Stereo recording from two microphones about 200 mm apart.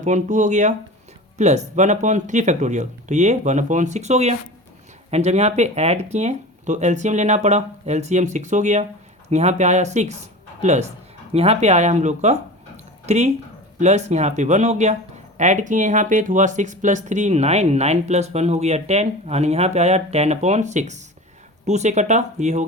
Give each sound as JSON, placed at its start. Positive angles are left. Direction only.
{"t": 0.0, "sound": "speech", "side_deg": -35}